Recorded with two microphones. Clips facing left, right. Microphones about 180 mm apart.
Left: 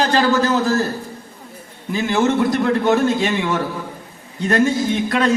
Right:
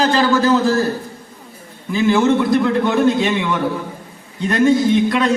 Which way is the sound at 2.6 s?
45° left (ahead or behind).